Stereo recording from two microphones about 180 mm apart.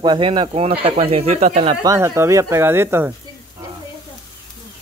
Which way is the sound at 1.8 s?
15° right (ahead or behind).